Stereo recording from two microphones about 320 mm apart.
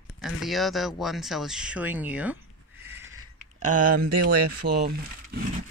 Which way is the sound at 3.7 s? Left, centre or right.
Right.